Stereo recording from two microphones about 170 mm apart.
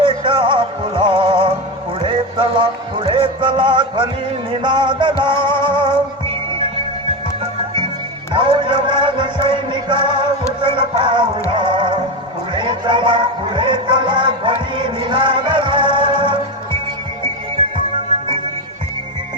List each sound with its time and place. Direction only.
0.0 s music: 30° right (ahead or behind)
8.3 s music: 30° right (ahead or behind)